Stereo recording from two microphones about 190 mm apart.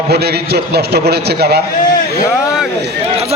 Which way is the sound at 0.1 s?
60° right (ahead or behind).